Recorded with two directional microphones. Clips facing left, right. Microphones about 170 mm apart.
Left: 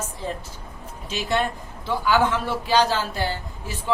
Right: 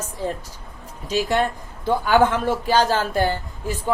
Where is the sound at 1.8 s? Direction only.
50° right (ahead or behind).